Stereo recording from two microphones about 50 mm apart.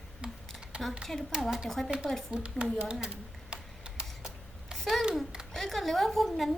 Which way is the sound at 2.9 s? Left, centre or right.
Centre.